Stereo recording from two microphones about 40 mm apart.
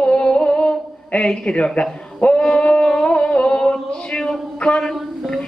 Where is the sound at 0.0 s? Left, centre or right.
Left.